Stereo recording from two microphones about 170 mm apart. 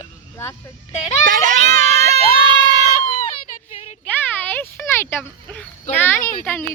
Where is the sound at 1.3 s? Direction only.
45° right (ahead or behind).